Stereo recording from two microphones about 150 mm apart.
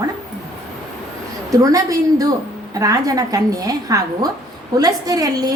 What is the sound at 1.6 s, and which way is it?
A woman's voice, 25° right (ahead or behind).